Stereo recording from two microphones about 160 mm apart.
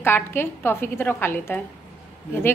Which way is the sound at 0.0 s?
15° left (ahead or behind).